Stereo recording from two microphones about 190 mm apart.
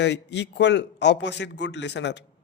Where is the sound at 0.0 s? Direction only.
65° left (ahead or behind).